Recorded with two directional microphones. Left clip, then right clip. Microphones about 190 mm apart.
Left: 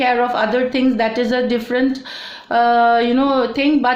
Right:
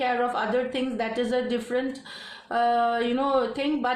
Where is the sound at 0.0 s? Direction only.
35° left (ahead or behind).